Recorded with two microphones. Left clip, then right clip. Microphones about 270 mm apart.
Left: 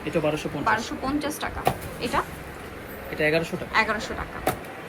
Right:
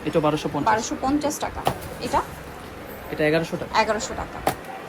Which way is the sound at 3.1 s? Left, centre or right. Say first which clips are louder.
Right 2 dB; right.